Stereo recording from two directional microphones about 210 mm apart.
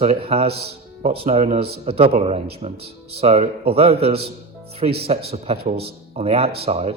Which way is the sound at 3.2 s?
30° right (ahead or behind).